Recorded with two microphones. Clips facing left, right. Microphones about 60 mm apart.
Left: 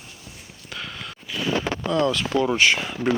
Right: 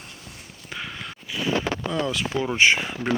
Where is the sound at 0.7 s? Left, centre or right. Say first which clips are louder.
Even; right.